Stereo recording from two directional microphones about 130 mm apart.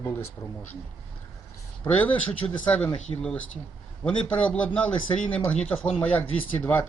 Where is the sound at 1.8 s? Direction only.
10° left (ahead or behind).